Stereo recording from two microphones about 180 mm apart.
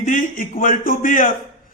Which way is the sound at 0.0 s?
50° left (ahead or behind).